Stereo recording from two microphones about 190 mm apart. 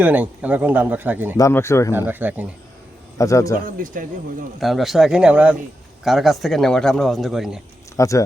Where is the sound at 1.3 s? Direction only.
15° left (ahead or behind).